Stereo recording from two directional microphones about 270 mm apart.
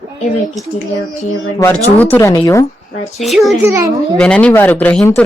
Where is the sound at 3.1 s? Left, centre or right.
Centre.